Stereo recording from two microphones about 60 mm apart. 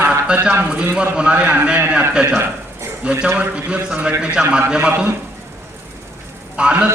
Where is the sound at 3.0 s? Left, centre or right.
Centre.